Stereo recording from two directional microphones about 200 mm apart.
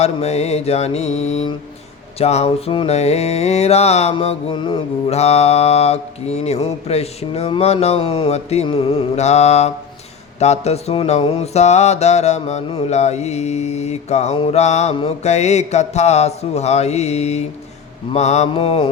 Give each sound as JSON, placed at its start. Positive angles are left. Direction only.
{"t": 0.0, "sound": "mantra", "side_deg": 35}